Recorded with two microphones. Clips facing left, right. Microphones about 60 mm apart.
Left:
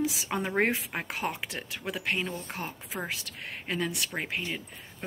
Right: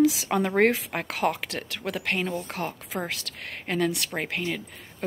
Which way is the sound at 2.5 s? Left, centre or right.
Right.